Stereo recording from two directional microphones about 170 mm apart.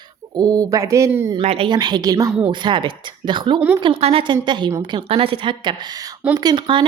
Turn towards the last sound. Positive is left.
turn(degrees=-25)  # may be behind; listen again after turning